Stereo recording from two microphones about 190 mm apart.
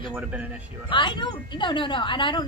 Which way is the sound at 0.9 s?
25° left (ahead or behind).